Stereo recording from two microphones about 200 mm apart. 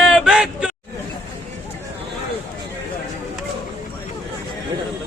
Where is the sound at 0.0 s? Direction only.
Centre (ahead or behind).